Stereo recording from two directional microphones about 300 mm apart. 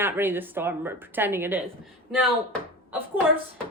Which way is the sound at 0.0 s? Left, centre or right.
Centre.